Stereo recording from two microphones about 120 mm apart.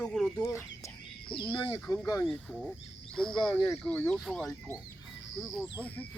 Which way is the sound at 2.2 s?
Centre (ahead or behind).